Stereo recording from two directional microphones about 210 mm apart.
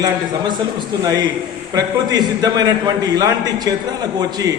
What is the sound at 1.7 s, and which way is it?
A man's voice, 20° right (ahead or behind).